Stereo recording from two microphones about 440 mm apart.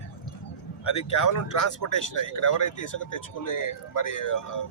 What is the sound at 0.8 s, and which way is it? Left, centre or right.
Speech, left.